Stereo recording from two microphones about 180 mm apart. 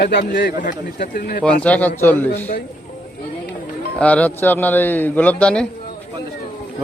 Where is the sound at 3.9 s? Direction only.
10° left (ahead or behind).